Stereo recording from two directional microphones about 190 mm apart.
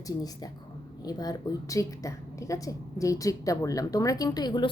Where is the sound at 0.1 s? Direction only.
20° left (ahead or behind).